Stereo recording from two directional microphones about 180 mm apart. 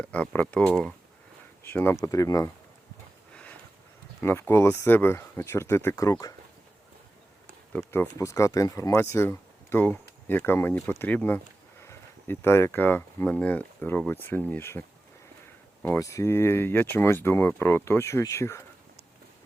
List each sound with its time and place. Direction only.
0.0 s speech: 10° left (ahead or behind)
3.3 s a sound: 5° left (ahead or behind)
4.2 s speech: 15° left (ahead or behind)
7.7 s speech: 10° left (ahead or behind)